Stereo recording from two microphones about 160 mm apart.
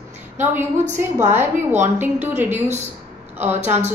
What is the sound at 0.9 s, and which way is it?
A woman's voice, 15° right (ahead or behind).